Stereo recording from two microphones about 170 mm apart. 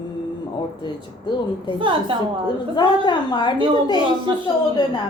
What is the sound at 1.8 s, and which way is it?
Speech, 30° right (ahead or behind).